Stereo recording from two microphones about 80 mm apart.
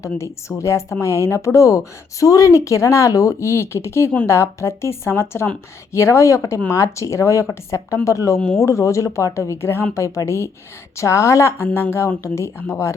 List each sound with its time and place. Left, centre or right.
0.0 s a woman's voice: left